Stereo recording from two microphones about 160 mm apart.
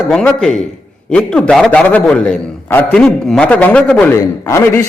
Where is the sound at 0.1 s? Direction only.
5° left (ahead or behind).